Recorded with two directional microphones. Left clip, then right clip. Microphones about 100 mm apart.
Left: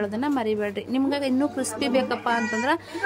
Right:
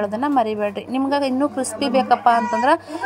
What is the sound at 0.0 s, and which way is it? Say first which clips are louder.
A woman's voice: right 7 dB; 15° right (ahead or behind).